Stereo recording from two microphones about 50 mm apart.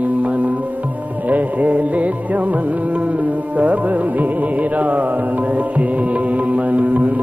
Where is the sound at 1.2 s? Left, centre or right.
Right.